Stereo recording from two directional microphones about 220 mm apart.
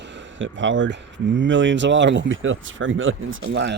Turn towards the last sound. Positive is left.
turn(degrees=-55)  # may be behind; listen again after turning